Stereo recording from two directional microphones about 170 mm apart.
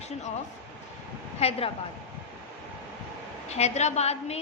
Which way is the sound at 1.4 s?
35° left (ahead or behind).